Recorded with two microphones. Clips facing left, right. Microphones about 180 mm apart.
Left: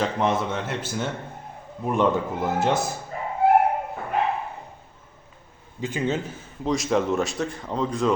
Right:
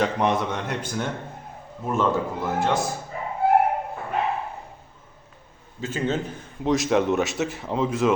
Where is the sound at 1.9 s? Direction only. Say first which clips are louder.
Left 1 dB; 20° left (ahead or behind).